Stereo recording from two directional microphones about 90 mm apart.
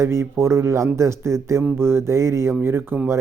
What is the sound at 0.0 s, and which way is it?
Speech, 30° right (ahead or behind).